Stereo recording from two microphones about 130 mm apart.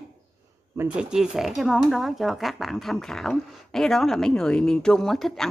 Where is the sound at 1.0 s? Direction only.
5° right (ahead or behind).